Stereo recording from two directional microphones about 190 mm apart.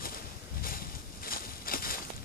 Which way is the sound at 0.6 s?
50° left (ahead or behind).